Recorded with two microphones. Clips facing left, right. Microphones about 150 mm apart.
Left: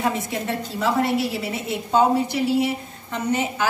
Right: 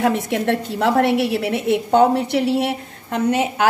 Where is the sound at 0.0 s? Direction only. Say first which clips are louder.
Right 6 dB; 70° right (ahead or behind).